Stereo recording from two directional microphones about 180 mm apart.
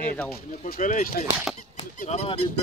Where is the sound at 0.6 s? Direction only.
55° left (ahead or behind); by 2.4 s 35° left (ahead or behind).